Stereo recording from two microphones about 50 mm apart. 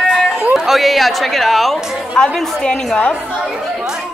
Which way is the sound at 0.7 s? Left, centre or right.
Centre.